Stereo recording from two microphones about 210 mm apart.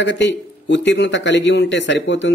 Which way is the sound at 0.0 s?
60° left (ahead or behind).